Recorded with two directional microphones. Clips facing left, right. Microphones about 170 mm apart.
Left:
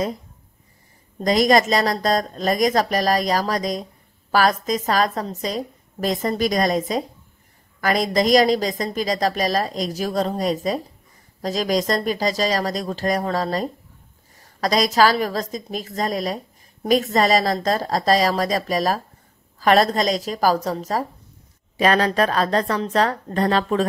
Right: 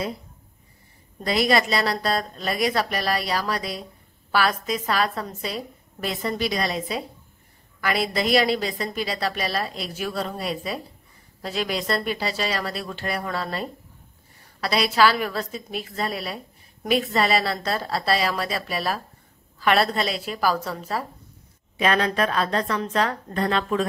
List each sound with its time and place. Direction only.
1.2 s a woman's voice: 40° left (ahead or behind)